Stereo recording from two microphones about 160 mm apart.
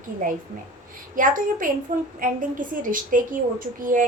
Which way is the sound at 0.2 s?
60° right (ahead or behind).